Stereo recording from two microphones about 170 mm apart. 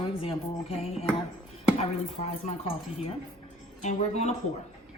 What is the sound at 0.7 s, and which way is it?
Speech, 35° left (ahead or behind).